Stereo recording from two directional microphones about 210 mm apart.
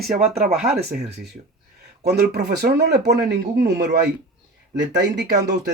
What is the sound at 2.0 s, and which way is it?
Speech, 50° right (ahead or behind).